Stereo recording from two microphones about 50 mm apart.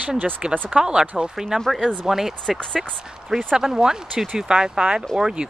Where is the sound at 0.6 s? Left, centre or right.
Centre.